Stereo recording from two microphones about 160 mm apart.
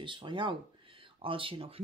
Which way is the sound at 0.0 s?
30° right (ahead or behind).